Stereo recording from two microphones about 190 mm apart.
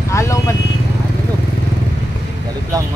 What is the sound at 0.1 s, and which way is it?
Vehicle, 15° left (ahead or behind).